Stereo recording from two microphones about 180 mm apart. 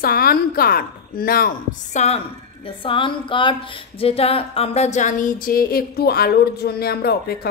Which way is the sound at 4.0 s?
35° left (ahead or behind).